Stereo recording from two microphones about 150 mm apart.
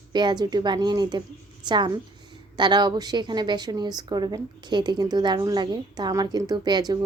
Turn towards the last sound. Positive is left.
turn(degrees=-30)  # may be behind; listen again after turning